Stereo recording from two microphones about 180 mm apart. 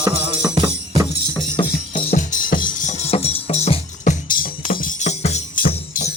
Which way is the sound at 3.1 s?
35° left (ahead or behind).